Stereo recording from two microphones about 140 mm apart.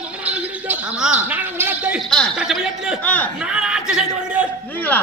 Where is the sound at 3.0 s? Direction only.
10° left (ahead or behind).